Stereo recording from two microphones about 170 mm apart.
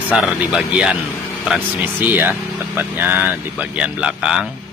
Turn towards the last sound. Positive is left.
turn(degrees=-5)  # may be behind; listen again after turning